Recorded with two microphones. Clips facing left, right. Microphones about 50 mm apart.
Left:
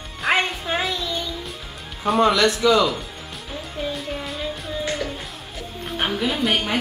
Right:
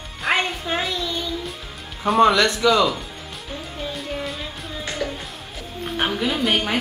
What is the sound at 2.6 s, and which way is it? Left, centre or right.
Speech, centre.